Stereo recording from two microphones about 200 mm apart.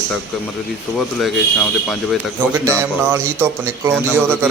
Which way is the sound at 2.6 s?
15° right (ahead or behind).